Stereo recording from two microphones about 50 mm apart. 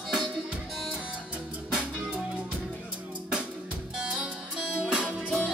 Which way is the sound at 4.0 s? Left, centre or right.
Centre.